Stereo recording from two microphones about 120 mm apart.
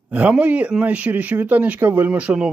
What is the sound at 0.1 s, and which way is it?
Speech, 10° right (ahead or behind).